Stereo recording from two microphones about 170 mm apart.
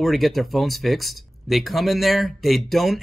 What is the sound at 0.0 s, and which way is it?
Speech, centre (ahead or behind).